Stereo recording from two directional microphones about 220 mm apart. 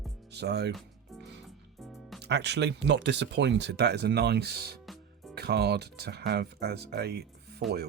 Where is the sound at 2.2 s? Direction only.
50° right (ahead or behind).